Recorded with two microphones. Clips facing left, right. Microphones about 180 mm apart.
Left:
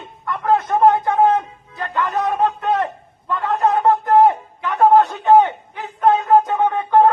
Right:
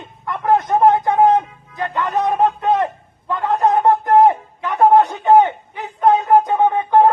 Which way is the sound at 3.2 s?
15° right (ahead or behind).